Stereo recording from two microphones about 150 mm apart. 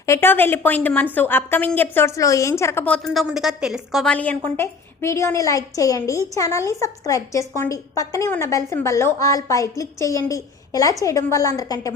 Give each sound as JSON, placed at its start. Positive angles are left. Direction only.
{"t": 0.0, "sound": "a woman's voice", "side_deg": 15}
{"t": 3.1, "sound": "a woman's voice", "side_deg": 0}
{"t": 4.1, "sound": "a woman's voice", "side_deg": 10}